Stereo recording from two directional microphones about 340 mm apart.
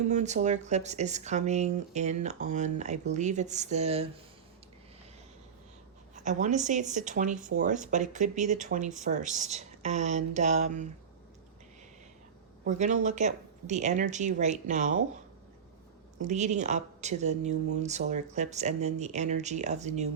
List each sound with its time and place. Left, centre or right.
0.1 s speech: right
6.1 s speech: right
12.6 s speech: right
16.1 s speech: right